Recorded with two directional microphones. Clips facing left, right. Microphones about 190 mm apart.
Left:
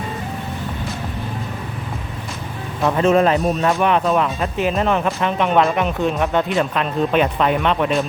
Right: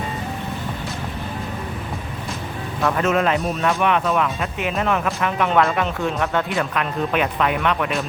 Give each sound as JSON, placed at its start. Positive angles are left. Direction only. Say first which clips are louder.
{"t": 3.0, "sound": "speech", "louder": "left 6 dB", "side_deg": 35}